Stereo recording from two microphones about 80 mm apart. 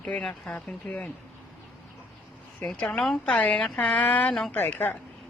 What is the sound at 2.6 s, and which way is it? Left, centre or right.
A woman's voice, centre.